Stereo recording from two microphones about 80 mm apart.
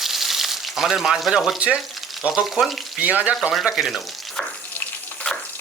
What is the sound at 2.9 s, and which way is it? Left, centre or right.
Speech, centre.